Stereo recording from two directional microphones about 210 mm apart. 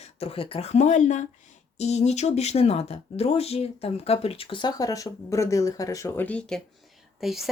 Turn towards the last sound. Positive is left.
turn(degrees=0)  # may be behind; listen again after turning